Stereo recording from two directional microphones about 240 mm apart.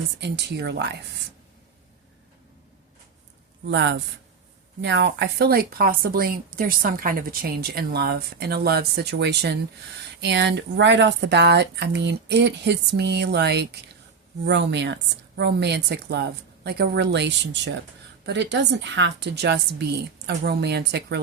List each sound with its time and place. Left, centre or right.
0.2 s speech: right
3.7 s speech: right